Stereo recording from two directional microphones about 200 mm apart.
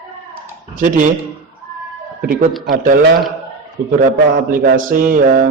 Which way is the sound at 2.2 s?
45° right (ahead or behind).